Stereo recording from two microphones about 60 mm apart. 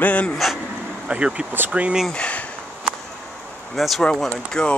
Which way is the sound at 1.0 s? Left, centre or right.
Centre.